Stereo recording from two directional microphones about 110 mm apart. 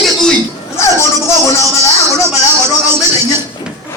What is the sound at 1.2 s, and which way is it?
Speech, 30° left (ahead or behind).